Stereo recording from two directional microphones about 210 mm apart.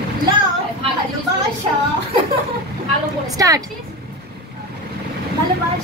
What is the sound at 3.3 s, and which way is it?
Speech, 15° right (ahead or behind).